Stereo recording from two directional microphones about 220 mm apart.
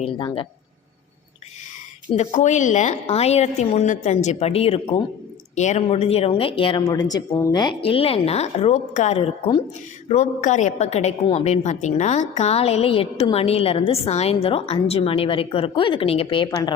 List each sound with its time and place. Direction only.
0.0 s a woman's voice: 25° left (ahead or behind)
2.1 s a woman's voice: 30° left (ahead or behind)